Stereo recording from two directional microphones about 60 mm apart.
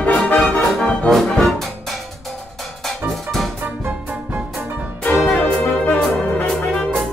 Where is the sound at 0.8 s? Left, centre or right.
Centre.